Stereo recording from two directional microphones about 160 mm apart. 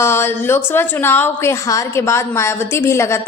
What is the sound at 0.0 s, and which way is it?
A woman's voice, 15° left (ahead or behind).